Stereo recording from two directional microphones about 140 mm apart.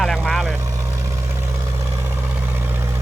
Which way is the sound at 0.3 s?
Centre (ahead or behind).